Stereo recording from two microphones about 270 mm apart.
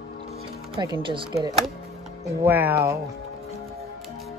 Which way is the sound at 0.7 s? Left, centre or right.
Centre.